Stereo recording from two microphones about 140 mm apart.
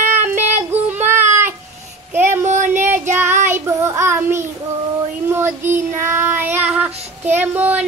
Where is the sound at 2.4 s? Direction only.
60° right (ahead or behind).